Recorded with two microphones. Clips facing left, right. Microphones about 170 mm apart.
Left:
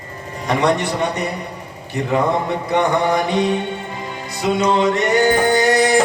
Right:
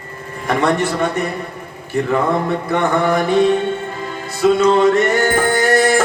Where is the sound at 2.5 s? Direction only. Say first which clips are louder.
Even; 50° right (ahead or behind).